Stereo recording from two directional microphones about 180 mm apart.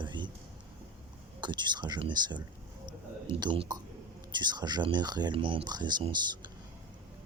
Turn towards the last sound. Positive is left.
turn(degrees=-25)  # may be behind; listen again after turning